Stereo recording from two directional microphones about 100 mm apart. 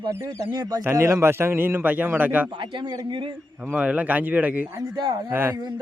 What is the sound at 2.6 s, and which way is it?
Speech, 50° right (ahead or behind).